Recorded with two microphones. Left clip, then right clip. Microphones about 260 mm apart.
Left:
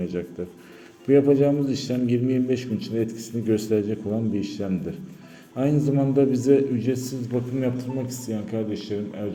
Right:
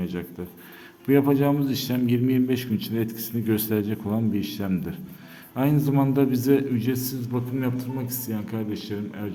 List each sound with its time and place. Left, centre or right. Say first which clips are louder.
0.0 s a man's voice: left 3 dB; centre